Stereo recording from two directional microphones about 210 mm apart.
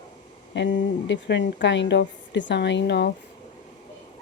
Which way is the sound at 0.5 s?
60° left (ahead or behind).